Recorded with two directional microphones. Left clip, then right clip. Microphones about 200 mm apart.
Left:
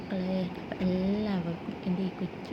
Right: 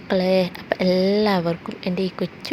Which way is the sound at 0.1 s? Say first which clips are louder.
Right 16 dB; 55° right (ahead or behind).